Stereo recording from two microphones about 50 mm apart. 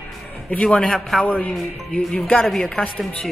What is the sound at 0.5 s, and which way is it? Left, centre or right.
Speech, left.